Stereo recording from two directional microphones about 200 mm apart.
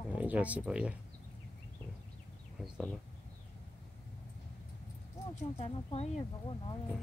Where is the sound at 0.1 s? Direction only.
5° right (ahead or behind).